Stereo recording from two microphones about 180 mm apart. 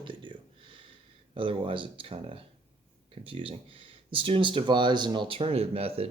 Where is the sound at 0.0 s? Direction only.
25° right (ahead or behind).